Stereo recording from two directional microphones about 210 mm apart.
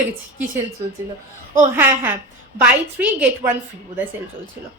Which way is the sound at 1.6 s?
10° right (ahead or behind).